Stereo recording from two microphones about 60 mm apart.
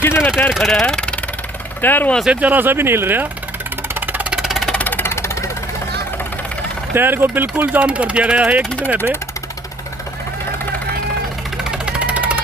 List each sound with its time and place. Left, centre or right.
0.0 s speech: left
0.5 s speech: centre
1.8 s speech: left
2.2 s speech: right
3.9 s music: right
4.4 s music: centre
4.7 s vehicle: left
5.0 s engine: left
6.9 s speech: right
11.5 s music: centre